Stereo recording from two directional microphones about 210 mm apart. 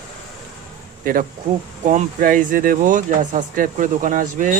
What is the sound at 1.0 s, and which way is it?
Speech, 40° right (ahead or behind).